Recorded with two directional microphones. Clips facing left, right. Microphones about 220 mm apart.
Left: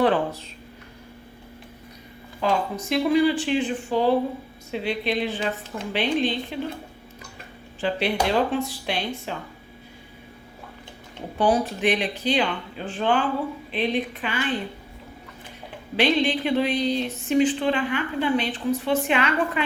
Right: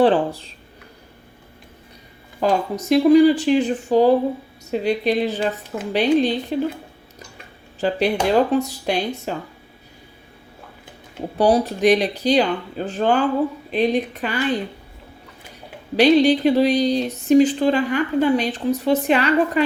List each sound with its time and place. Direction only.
0.0 s speech: 30° right (ahead or behind)
2.4 s speech: 45° right (ahead or behind)
7.8 s speech: 40° right (ahead or behind)
11.3 s speech: 40° right (ahead or behind)
16.0 s speech: 40° right (ahead or behind)